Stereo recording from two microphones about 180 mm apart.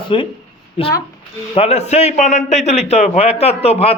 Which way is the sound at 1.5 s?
35° left (ahead or behind).